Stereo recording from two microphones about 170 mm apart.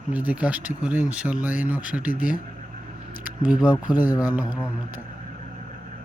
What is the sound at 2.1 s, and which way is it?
Speech, 55° left (ahead or behind).